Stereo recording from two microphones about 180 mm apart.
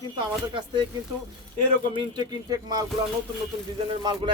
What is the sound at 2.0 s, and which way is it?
Speech, 25° right (ahead or behind).